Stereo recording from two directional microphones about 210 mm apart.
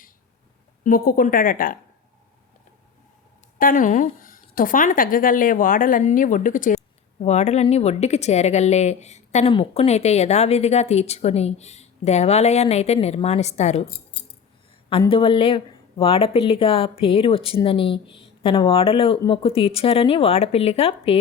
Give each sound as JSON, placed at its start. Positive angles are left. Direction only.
{"t": 0.9, "sound": "a woman's voice", "side_deg": 45}
{"t": 3.6, "sound": "speech", "side_deg": 40}
{"t": 15.1, "sound": "speech", "side_deg": 25}